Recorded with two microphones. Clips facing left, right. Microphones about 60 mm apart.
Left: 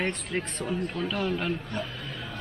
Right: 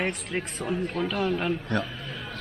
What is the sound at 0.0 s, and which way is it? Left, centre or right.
A man's voice, centre.